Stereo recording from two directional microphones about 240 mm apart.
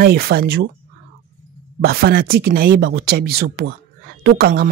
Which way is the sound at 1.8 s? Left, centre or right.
Right.